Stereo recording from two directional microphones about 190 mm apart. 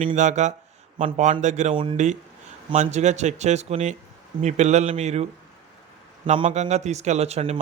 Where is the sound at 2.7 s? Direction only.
40° right (ahead or behind).